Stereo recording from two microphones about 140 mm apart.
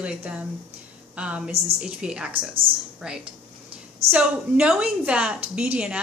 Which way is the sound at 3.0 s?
5° right (ahead or behind).